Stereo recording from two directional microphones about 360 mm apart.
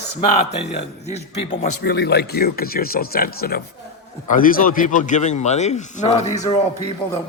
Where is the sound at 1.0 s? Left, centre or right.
Centre.